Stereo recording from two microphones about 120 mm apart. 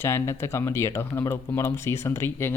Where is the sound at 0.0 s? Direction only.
20° left (ahead or behind).